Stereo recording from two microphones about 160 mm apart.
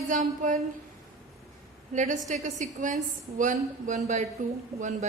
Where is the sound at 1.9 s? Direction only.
50° right (ahead or behind).